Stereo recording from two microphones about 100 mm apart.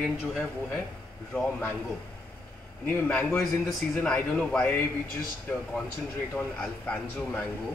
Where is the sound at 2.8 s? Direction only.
15° left (ahead or behind).